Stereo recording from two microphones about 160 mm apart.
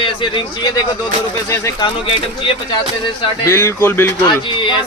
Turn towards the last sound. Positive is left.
turn(degrees=30)  # may be behind; listen again after turning